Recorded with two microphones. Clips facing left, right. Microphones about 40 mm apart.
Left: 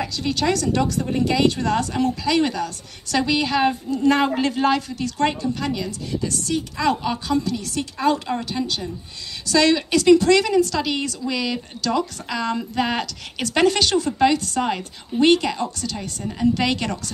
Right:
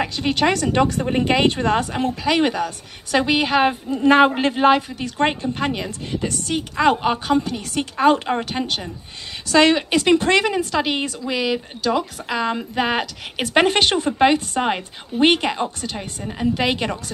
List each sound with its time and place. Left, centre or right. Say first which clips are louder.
0.0 s a woman's voice: right 3 dB; right